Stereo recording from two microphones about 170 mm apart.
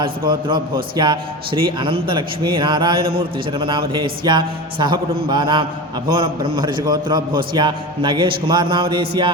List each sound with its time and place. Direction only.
0.0 s a man's voice: 30° right (ahead or behind)